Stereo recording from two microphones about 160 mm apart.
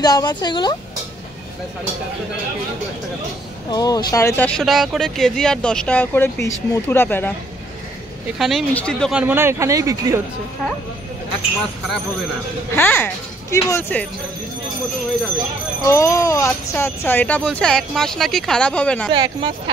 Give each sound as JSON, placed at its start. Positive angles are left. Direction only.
{"t": 0.0, "sound": "speech", "side_deg": 25}
{"t": 3.7, "sound": "speech", "side_deg": 25}
{"t": 8.4, "sound": "speech", "side_deg": 0}
{"t": 9.1, "sound": "speech", "side_deg": -10}
{"t": 12.7, "sound": "speech", "side_deg": 15}
{"t": 15.8, "sound": "speech", "side_deg": 20}
{"t": 19.0, "sound": "speech", "side_deg": -30}